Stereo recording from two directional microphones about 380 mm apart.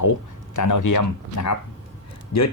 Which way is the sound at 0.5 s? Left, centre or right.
Left.